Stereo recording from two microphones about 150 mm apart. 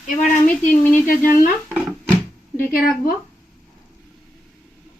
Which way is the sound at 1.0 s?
65° left (ahead or behind).